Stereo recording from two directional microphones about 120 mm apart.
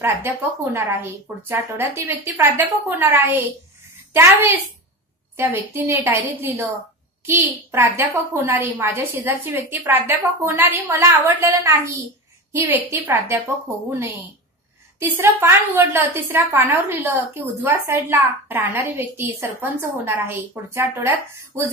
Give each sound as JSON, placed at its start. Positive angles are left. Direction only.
{"t": 0.7, "sound": "a woman's voice", "side_deg": -15}